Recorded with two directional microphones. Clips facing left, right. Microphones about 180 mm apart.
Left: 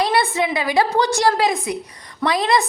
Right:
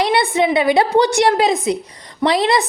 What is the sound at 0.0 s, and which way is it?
A woman's voice, 20° right (ahead or behind).